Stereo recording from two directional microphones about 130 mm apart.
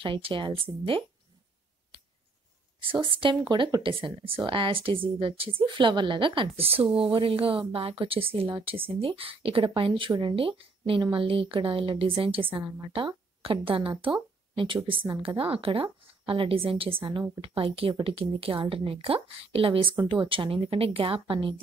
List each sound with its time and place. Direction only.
0.0 s speech: 40° right (ahead or behind)
3.0 s a woman's voice: 40° right (ahead or behind)
15.0 s a woman's voice: 45° right (ahead or behind)